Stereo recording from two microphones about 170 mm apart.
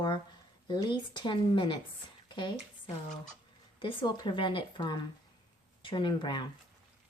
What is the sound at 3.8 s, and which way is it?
Speech, 30° left (ahead or behind).